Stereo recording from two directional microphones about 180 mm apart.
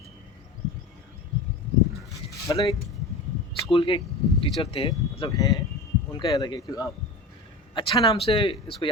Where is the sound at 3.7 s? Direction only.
30° left (ahead or behind).